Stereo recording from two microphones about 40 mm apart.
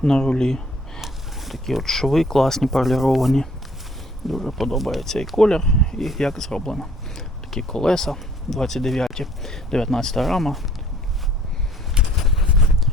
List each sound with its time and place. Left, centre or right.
0.0 s speech: centre
1.0 s mechanisms: centre
1.8 s speech: centre
5.4 s speech: centre
6.0 s speech: centre
12.0 s a sound: right